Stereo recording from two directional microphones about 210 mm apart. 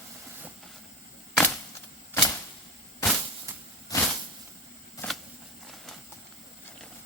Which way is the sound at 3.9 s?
15° left (ahead or behind).